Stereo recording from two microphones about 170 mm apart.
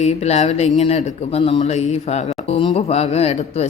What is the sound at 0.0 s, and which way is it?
A woman's voice, 40° left (ahead or behind).